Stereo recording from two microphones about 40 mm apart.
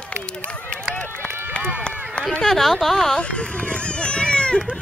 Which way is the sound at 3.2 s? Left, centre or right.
Left.